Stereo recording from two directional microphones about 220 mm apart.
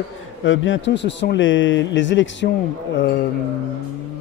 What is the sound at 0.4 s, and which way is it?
Speech, 60° left (ahead or behind).